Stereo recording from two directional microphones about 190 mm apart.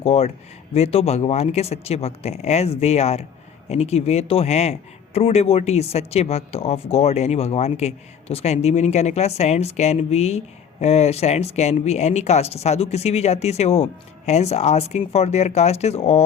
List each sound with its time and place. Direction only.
0.0 s speech: 30° left (ahead or behind)